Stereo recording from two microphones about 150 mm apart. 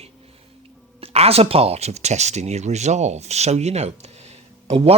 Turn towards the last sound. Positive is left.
turn(degrees=-40)  # may be behind; listen again after turning